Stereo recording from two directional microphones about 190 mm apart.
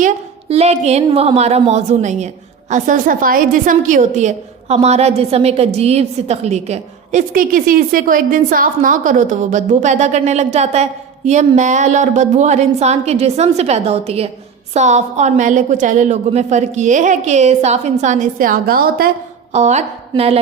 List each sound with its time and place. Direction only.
0.0 s a woman's voice: 35° right (ahead or behind); by 19.1 s 50° right (ahead or behind)
19.5 s a woman's voice: 35° right (ahead or behind)